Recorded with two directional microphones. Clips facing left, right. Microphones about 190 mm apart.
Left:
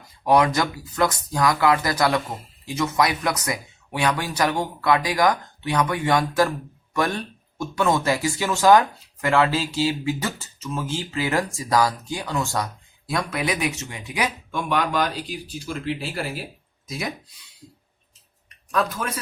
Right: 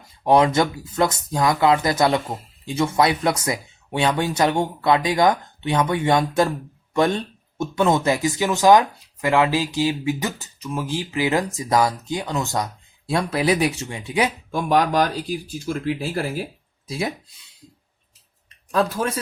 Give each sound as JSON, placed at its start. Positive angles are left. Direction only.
{"t": 0.3, "sound": "speech", "side_deg": -25}
{"t": 16.8, "sound": "speech", "side_deg": -30}
{"t": 18.7, "sound": "a man's voice", "side_deg": -30}